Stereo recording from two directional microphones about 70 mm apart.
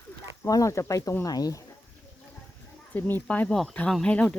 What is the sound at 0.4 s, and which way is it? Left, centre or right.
Speech, left.